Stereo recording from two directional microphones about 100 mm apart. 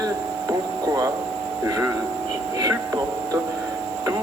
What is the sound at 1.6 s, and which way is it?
Speech, 35° right (ahead or behind).